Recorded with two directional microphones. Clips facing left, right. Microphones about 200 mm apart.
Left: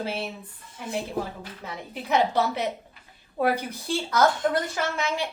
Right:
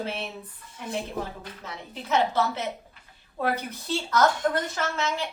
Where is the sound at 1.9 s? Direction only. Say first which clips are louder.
Left 2 dB; 15° left (ahead or behind).